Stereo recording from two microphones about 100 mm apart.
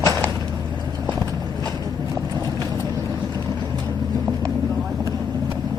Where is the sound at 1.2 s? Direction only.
35° right (ahead or behind).